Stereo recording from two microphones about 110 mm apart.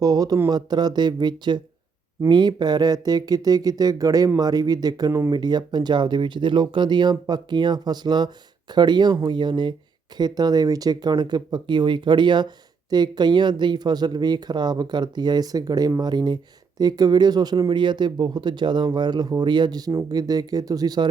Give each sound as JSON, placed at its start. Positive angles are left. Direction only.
{"t": 0.0, "sound": "speech", "side_deg": -35}